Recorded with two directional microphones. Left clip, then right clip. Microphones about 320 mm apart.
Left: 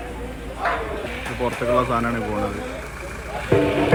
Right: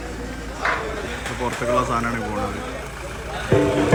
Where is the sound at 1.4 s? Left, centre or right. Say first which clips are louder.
Left 1 dB; centre.